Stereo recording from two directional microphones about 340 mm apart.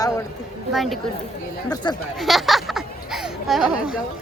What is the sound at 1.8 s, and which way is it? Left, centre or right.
Speech, centre.